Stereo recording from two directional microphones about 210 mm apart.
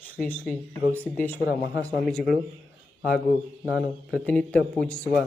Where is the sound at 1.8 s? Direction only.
5° left (ahead or behind).